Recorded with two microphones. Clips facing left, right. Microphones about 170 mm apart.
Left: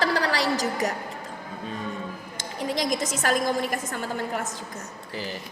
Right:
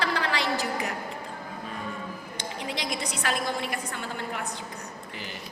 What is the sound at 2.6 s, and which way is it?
A woman's voice, 45° left (ahead or behind).